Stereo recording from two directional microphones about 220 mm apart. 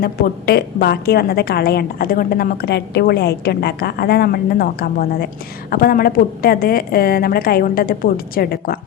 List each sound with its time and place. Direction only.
0.0 s a woman's voice: 45° left (ahead or behind)